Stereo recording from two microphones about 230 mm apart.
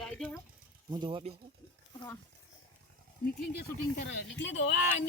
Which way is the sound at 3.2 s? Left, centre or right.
Left.